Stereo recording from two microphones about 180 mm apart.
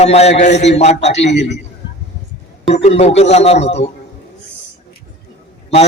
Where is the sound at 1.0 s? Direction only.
75° left (ahead or behind).